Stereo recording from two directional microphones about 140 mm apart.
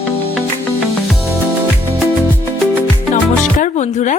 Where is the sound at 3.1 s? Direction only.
65° left (ahead or behind).